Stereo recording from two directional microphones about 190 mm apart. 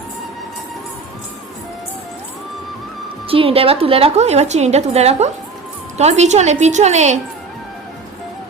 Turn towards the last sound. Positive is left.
turn(degrees=-35)  # may be behind; listen again after turning